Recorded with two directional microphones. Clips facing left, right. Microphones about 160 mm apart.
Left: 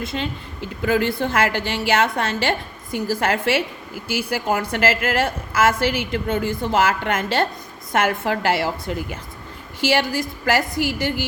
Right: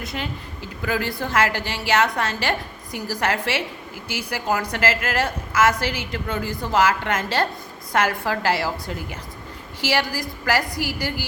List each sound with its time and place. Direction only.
0.0 s a woman's voice: 25° left (ahead or behind)
9.8 s a woman's voice: 25° left (ahead or behind)